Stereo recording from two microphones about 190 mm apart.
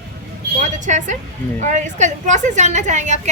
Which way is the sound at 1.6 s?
40° right (ahead or behind).